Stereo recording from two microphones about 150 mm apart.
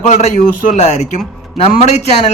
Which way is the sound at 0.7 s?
50° left (ahead or behind).